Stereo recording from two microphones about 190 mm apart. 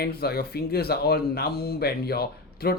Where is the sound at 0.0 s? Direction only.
55° left (ahead or behind).